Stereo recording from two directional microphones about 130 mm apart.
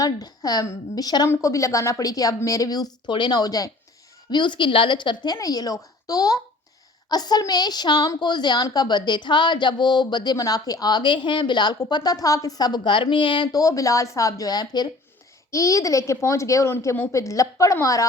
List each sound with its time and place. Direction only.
0.0 s a woman's voice: 30° left (ahead or behind)